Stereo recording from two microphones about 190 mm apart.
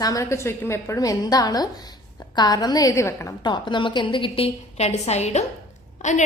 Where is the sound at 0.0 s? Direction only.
15° left (ahead or behind).